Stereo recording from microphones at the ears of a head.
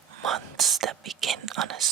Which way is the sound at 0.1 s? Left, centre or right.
Right.